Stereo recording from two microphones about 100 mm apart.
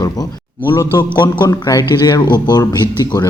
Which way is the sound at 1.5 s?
35° left (ahead or behind).